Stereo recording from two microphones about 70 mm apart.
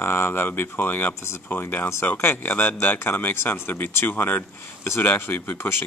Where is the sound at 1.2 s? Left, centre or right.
Left.